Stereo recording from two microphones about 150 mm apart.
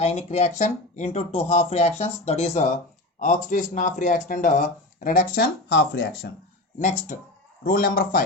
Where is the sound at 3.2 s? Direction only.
60° left (ahead or behind).